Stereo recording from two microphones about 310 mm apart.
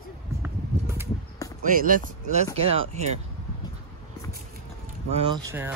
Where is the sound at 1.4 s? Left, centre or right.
Centre.